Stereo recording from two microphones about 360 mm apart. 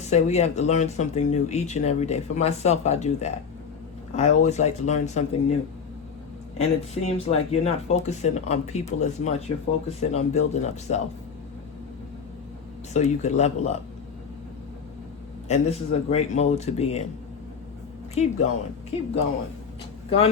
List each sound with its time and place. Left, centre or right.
0.0 s speech: centre
6.6 s speech: centre
12.9 s speech: centre
15.4 s speech: centre
18.1 s speech: centre
20.1 s a man's voice: centre